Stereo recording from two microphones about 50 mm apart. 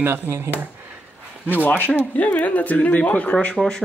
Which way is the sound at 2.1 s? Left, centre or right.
Left.